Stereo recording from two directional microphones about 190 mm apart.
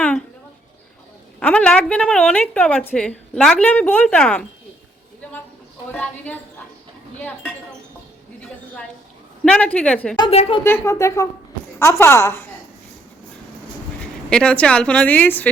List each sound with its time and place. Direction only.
1.4 s a woman's voice: 5° left (ahead or behind)
5.9 s speech: 10° left (ahead or behind)
9.4 s a woman's voice: 5° left (ahead or behind)
10.2 s a woman's voice: 30° left (ahead or behind)
10.6 s speech: 15° left (ahead or behind)
14.0 s speech: 5° left (ahead or behind)